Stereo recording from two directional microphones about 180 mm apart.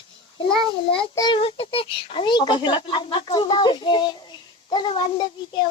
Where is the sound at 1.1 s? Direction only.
25° left (ahead or behind).